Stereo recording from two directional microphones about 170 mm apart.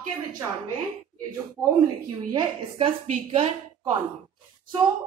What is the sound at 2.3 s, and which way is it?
A woman's voice, 30° right (ahead or behind).